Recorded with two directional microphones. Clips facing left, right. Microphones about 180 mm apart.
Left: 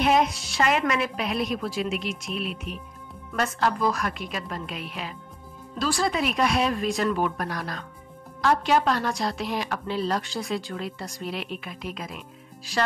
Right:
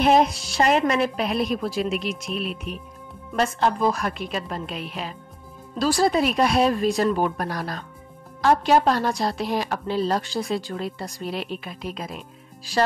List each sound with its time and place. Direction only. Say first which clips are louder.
0.0 s a woman's voice: right 4 dB; 35° right (ahead or behind)
3.3 s a woman's voice: right 3 dB; 25° right (ahead or behind)